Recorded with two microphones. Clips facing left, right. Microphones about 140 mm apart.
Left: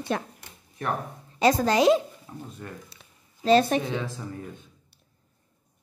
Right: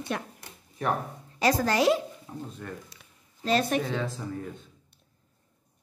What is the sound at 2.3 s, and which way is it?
Speech, centre (ahead or behind).